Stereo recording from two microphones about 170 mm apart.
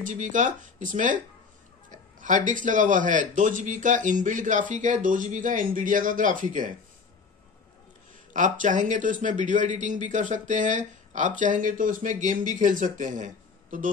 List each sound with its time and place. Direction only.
0.0 s speech: 50° right (ahead or behind)
8.3 s speech: 45° right (ahead or behind)